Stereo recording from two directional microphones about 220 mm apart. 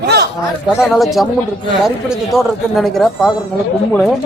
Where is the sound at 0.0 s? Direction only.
45° right (ahead or behind).